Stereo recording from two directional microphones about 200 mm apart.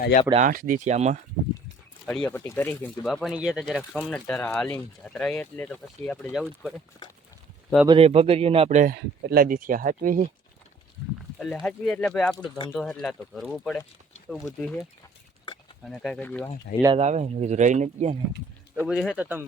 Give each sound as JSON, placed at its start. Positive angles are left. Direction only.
{"t": 0.3, "sound": "speech", "side_deg": -40}
{"t": 2.0, "sound": "speech", "side_deg": 10}
{"t": 7.9, "sound": "speech", "side_deg": -30}
{"t": 11.3, "sound": "speech", "side_deg": 0}
{"t": 16.7, "sound": "speech", "side_deg": 45}
{"t": 17.0, "sound": "speech", "side_deg": -35}
{"t": 18.9, "sound": "speech", "side_deg": -5}